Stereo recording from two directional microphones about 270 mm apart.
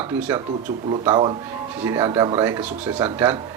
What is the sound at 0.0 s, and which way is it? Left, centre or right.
Speech, centre.